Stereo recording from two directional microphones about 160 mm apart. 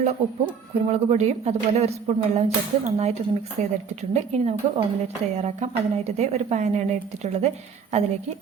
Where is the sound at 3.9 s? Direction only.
45° right (ahead or behind).